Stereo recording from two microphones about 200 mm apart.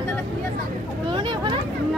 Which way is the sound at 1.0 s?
25° right (ahead or behind).